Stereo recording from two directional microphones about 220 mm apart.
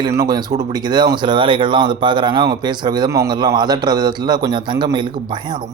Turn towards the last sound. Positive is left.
turn(degrees=-20)  # may be behind; listen again after turning